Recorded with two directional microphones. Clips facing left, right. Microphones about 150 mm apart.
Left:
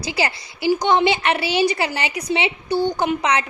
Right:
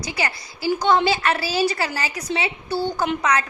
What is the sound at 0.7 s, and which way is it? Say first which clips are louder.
A woman's voice: left 1 dB; 15° left (ahead or behind).